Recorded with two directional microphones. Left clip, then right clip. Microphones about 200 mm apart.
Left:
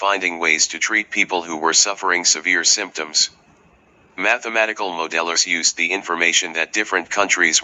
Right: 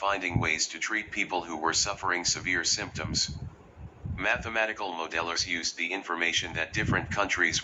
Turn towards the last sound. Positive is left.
turn(degrees=45)  # may be behind; listen again after turning